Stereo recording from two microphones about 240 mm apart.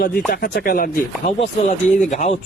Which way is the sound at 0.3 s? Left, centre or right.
Left.